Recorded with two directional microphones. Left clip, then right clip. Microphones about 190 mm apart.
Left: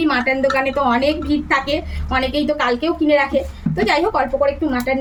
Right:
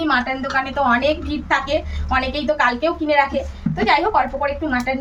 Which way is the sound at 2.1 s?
20° right (ahead or behind).